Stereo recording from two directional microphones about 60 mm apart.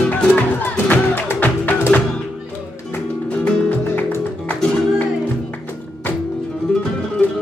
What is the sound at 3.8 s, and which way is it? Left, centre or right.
Music, left.